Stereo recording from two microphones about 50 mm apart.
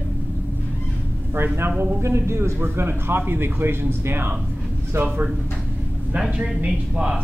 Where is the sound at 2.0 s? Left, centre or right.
Right.